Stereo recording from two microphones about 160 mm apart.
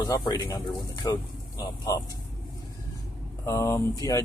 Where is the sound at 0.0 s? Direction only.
25° left (ahead or behind).